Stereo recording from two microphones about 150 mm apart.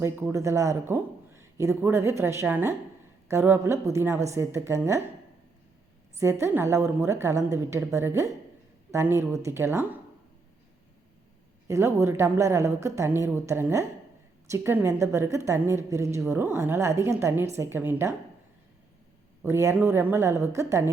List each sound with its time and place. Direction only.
0.0 s a man's voice: 20° right (ahead or behind)
6.4 s a woman's voice: 15° right (ahead or behind)
11.7 s a man's voice: 20° right (ahead or behind)
19.5 s a man's voice: 20° right (ahead or behind)